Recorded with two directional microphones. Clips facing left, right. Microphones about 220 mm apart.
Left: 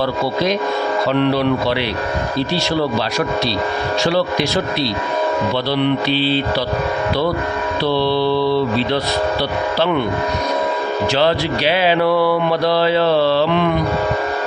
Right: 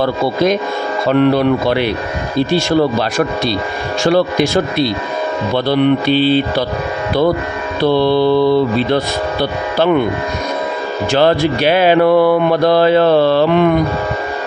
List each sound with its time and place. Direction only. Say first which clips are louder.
0.0 s music: right 4 dB; 50° right (ahead or behind)
7.8 s music: right 6 dB; 50° right (ahead or behind)
11.1 s music: right 6 dB; 50° right (ahead or behind)